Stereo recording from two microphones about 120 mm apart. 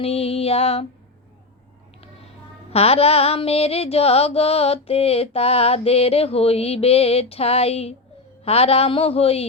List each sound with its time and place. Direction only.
0.0 s mantra: 55° left (ahead or behind)
2.7 s mantra: 55° left (ahead or behind)